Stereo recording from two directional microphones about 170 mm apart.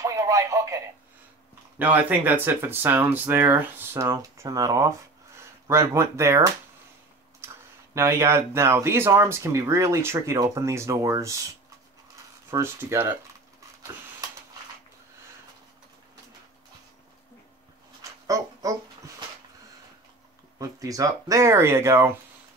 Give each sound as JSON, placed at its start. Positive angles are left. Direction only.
{"t": 0.0, "sound": "speech", "side_deg": -20}
{"t": 1.8, "sound": "speech", "side_deg": -10}
{"t": 12.4, "sound": "speech", "side_deg": -15}
{"t": 18.2, "sound": "a sound", "side_deg": -20}
{"t": 20.5, "sound": "speech", "side_deg": -20}